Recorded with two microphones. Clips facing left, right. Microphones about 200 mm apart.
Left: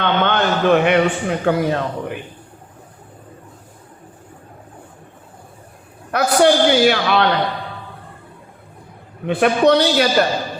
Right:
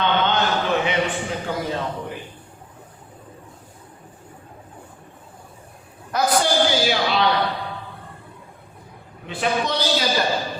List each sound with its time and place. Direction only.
0.0 s a man's voice: 60° left (ahead or behind)
6.1 s a man's voice: 65° left (ahead or behind)
9.2 s a man's voice: 60° left (ahead or behind)